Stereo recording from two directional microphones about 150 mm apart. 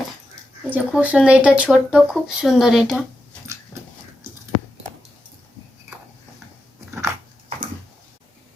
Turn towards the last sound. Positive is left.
turn(degrees=-20)  # may be behind; listen again after turning